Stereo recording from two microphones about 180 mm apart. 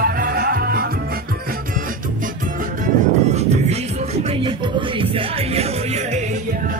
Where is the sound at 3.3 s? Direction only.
35° right (ahead or behind).